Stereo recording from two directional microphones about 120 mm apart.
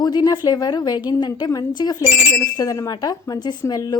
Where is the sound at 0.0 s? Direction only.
35° left (ahead or behind).